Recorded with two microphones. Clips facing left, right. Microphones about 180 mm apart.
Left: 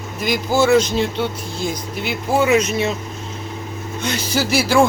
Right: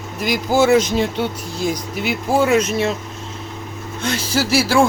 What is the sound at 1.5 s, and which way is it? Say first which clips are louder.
Speech: right 6 dB; 40° right (ahead or behind).